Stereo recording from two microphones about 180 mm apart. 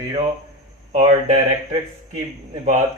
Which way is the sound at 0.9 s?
40° right (ahead or behind).